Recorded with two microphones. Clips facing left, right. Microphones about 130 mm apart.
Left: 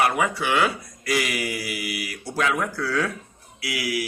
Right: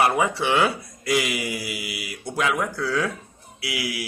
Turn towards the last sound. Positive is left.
turn(degrees=-25)  # may be behind; listen again after turning